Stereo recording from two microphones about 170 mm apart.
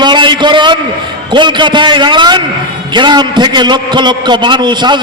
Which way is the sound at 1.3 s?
25° right (ahead or behind).